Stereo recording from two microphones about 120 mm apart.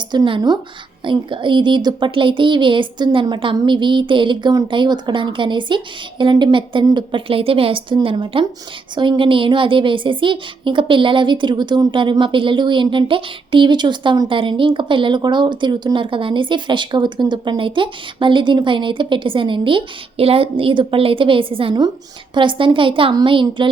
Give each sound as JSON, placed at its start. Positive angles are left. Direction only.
{"t": 0.1, "sound": "a woman's voice", "side_deg": -40}